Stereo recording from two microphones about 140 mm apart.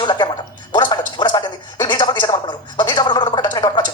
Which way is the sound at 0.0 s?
35° left (ahead or behind).